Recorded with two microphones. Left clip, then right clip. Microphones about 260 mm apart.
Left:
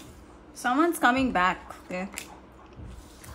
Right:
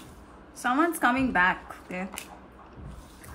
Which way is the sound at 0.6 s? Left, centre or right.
Centre.